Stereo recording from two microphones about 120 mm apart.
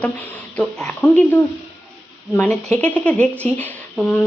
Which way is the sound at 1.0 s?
15° left (ahead or behind).